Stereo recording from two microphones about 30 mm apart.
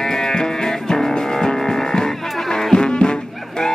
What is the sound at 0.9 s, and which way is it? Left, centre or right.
Music, left.